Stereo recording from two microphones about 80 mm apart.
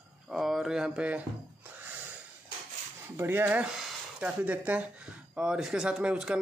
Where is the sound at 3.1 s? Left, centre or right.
Right.